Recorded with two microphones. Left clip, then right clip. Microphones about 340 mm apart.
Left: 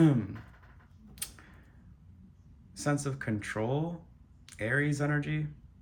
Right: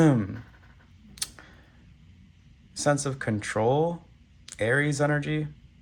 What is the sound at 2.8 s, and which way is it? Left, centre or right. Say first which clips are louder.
Speech: right 8 dB; centre.